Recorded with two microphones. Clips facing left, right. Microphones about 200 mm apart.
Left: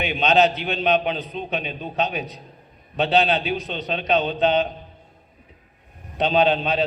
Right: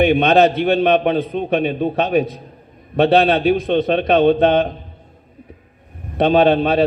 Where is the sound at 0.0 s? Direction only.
55° right (ahead or behind).